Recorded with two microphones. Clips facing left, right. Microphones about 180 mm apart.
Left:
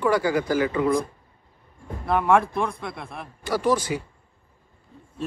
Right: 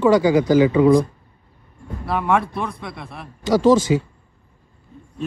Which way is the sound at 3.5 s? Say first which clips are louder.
Right 8 dB; 25° right (ahead or behind).